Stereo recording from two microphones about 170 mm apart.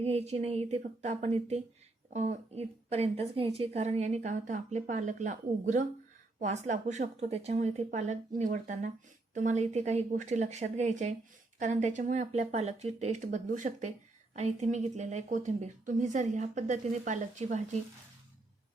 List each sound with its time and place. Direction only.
0.0 s a woman's voice: 40° right (ahead or behind)